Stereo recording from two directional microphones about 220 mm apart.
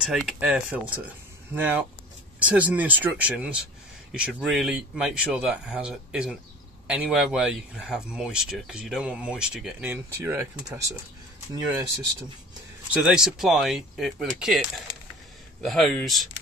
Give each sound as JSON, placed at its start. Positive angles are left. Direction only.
{"t": 0.0, "sound": "speech", "side_deg": 0}
{"t": 12.9, "sound": "speech", "side_deg": -5}